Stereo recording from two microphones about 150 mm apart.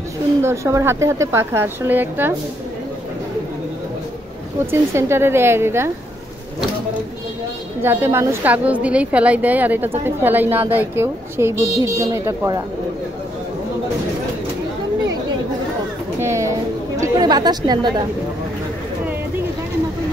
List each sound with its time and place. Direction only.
0.4 s a woman's voice: 20° right (ahead or behind)
4.6 s a woman's voice: 15° right (ahead or behind)
7.8 s a woman's voice: 15° right (ahead or behind)
16.2 s a woman's voice: 20° right (ahead or behind)